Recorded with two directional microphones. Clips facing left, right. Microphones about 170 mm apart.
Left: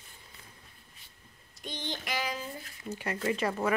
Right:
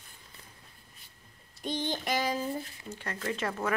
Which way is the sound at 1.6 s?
45° right (ahead or behind).